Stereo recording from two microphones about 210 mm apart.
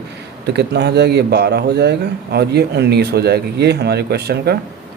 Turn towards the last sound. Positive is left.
turn(degrees=-50)  # may be behind; listen again after turning